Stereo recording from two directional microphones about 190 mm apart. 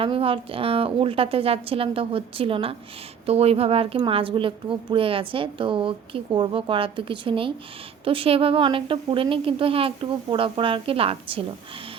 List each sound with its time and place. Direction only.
0.0 s a woman's voice: 30° right (ahead or behind)